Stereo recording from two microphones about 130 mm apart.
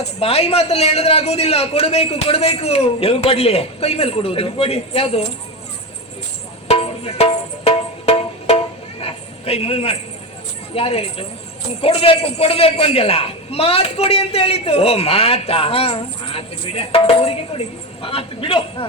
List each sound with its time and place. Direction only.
0.2 s a man's voice: 50° left (ahead or behind)
6.7 s music: 50° left (ahead or behind)
9.0 s a sound: 50° left (ahead or behind)
10.8 s a man's voice: 50° left (ahead or behind)